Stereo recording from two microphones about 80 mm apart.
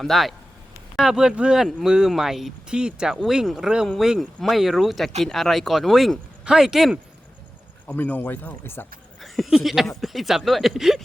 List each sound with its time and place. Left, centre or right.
0.0 s speech: centre
7.9 s speech: left
9.2 s a sound: centre
9.6 s speech: centre